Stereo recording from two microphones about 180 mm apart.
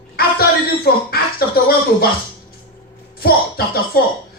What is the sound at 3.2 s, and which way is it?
Speech, 60° left (ahead or behind).